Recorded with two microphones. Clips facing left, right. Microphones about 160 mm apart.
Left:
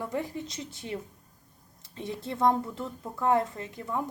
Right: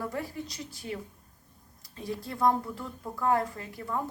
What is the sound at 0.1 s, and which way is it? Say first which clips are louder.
A woman's voice: left 3 dB; 20° left (ahead or behind).